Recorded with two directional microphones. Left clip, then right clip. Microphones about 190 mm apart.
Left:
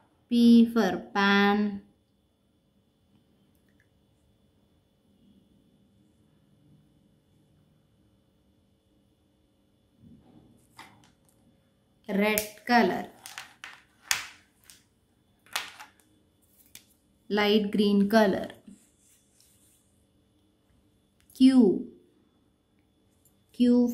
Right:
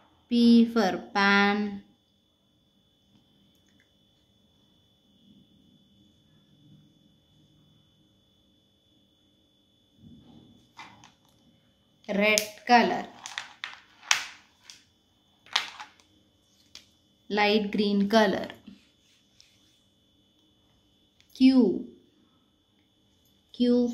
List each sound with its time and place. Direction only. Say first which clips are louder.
0.3 s a woman's voice: even; 20° left (ahead or behind)
12.1 s speech: right 3 dB; 25° left (ahead or behind)
17.3 s a woman's voice: right 1 dB; 25° left (ahead or behind)
21.3 s speech: even; 45° left (ahead or behind)
23.5 s speech: even; 40° left (ahead or behind)